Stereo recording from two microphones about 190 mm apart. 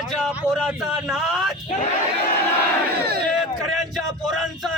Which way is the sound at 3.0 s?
55° right (ahead or behind).